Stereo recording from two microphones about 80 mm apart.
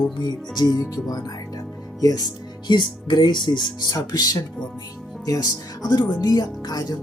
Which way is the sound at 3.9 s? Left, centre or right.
Left.